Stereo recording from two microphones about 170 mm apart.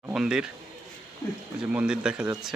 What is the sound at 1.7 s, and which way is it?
Speech, 5° right (ahead or behind).